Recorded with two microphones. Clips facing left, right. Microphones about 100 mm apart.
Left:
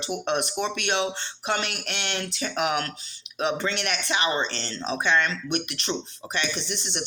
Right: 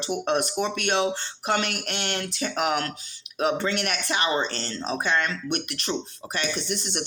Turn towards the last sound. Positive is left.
turn(degrees=-45)  # may be behind; listen again after turning